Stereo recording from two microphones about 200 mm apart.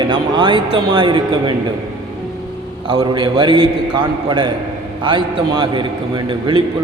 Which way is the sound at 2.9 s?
20° right (ahead or behind).